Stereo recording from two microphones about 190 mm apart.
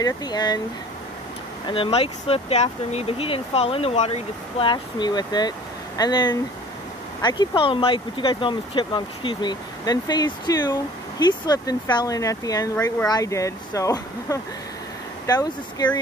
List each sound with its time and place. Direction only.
0.0 s speech: 20° left (ahead or behind)
1.7 s speech: 30° left (ahead or behind)